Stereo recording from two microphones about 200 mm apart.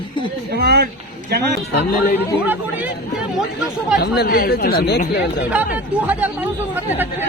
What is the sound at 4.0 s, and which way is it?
Speech, 50° left (ahead or behind).